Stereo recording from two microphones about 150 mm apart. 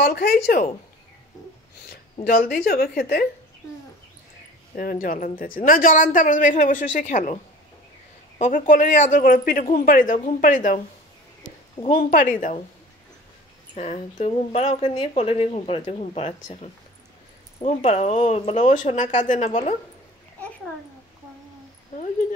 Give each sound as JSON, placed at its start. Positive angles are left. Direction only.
{"t": 0.0, "sound": "speech", "side_deg": 80}
{"t": 2.2, "sound": "speech", "side_deg": 80}
{"t": 4.7, "sound": "speech", "side_deg": 70}
{"t": 8.4, "sound": "speech", "side_deg": 60}
{"t": 12.0, "sound": "speech", "side_deg": 65}
{"t": 13.7, "sound": "speech", "side_deg": 50}
{"t": 17.6, "sound": "speech", "side_deg": 45}
{"t": 21.9, "sound": "speech", "side_deg": 60}